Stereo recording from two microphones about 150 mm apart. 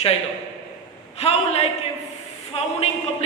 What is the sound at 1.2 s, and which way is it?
Speech, 45° left (ahead or behind).